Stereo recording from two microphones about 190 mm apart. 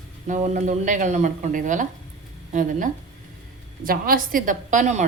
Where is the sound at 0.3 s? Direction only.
40° right (ahead or behind).